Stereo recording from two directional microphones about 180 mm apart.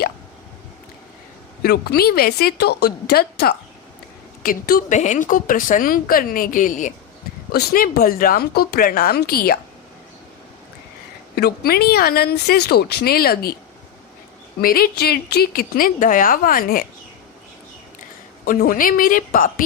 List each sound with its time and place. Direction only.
1.6 s speech: 60° left (ahead or behind)
4.9 s speech: 40° left (ahead or behind); by 9.6 s 60° left (ahead or behind)
11.3 s speech: 60° left (ahead or behind)
14.6 s speech: 55° left (ahead or behind)
18.4 s speech: 50° left (ahead or behind)